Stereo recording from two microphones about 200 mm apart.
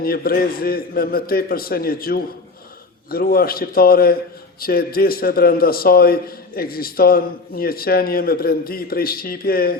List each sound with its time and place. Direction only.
0.0 s a man's voice: 50° left (ahead or behind)